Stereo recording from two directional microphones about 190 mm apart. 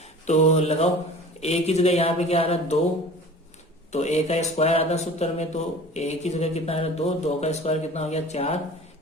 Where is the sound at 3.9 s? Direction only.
35° left (ahead or behind).